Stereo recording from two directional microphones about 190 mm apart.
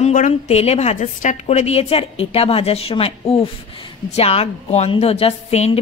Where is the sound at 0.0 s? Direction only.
40° left (ahead or behind).